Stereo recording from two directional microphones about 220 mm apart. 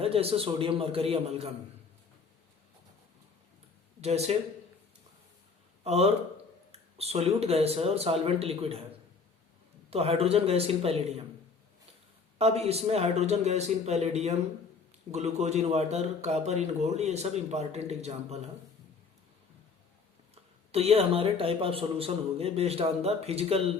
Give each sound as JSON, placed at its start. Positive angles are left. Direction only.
{"t": 0.0, "sound": "speech", "side_deg": -25}
{"t": 4.0, "sound": "speech", "side_deg": -30}
{"t": 5.8, "sound": "speech", "side_deg": -30}
{"t": 9.9, "sound": "speech", "side_deg": -25}
{"t": 12.4, "sound": "speech", "side_deg": -30}
{"t": 20.3, "sound": "speech", "side_deg": -25}